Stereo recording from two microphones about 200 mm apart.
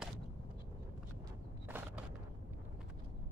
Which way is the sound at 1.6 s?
10° right (ahead or behind).